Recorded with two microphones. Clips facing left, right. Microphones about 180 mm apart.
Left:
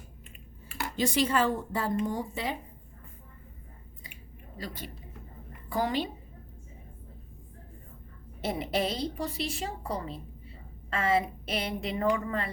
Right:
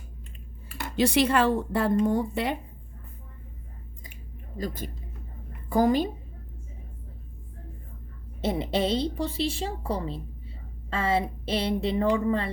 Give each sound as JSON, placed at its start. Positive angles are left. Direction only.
{"t": 0.9, "sound": "speech", "side_deg": -70}
{"t": 4.0, "sound": "chewing", "side_deg": -45}
{"t": 5.6, "sound": "a woman's voice", "side_deg": -45}
{"t": 8.4, "sound": "a woman's voice", "side_deg": -25}